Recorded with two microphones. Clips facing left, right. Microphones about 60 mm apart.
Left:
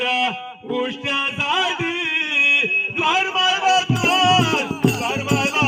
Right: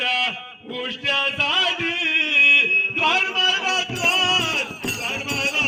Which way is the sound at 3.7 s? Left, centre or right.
Right.